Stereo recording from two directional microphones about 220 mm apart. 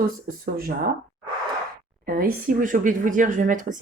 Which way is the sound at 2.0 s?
40° right (ahead or behind).